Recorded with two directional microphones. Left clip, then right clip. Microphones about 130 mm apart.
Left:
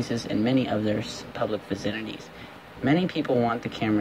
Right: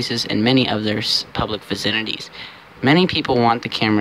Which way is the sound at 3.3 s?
40° right (ahead or behind).